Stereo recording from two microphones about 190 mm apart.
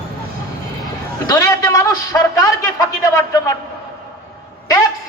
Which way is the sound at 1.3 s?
20° left (ahead or behind).